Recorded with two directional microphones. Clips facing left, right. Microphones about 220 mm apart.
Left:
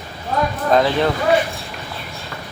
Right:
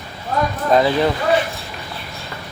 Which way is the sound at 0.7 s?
5° right (ahead or behind).